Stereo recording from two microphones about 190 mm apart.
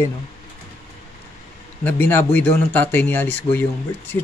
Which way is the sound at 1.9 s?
10° left (ahead or behind).